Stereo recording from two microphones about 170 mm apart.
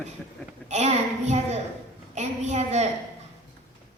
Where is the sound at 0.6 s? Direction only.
40° right (ahead or behind).